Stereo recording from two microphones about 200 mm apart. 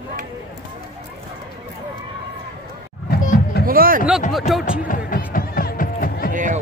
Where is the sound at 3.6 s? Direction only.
45° right (ahead or behind).